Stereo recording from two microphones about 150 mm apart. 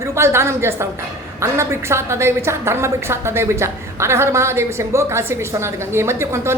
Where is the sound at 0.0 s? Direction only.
15° right (ahead or behind).